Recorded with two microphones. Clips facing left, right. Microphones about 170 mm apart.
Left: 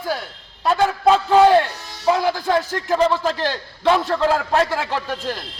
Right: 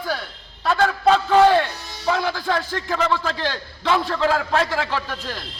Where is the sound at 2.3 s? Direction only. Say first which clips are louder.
Left 4 dB; 45° left (ahead or behind).